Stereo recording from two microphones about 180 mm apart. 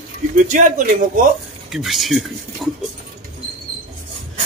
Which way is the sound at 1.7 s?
Centre (ahead or behind).